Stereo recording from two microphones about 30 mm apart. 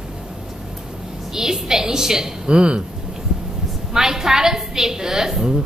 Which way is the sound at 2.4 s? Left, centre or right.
Right.